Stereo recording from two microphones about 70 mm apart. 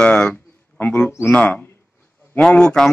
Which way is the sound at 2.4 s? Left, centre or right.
Centre.